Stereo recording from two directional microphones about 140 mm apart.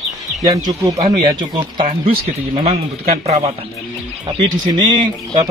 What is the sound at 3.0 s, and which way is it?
Speech, 55° right (ahead or behind).